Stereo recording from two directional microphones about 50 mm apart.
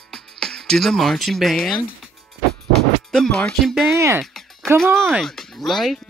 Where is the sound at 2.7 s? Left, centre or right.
Centre.